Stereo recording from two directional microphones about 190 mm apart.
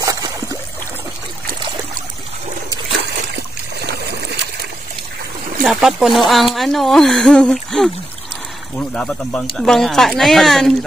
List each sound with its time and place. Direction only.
0.0 s a sound: 15° right (ahead or behind)
3.8 s water: 60° right (ahead or behind)
5.6 s speech: centre (ahead or behind)